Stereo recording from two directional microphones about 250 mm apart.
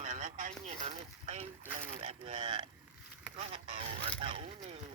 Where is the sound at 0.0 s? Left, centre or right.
Right.